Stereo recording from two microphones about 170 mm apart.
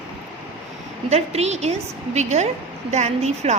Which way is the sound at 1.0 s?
40° right (ahead or behind).